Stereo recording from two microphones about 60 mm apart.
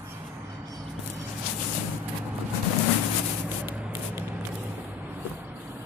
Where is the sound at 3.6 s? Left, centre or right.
Right.